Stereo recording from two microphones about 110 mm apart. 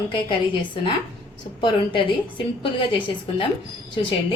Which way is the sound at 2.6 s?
50° left (ahead or behind).